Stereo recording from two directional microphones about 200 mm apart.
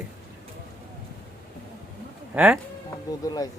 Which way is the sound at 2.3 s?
5° right (ahead or behind).